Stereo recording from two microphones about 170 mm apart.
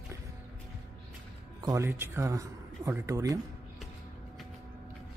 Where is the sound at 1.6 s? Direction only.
20° right (ahead or behind).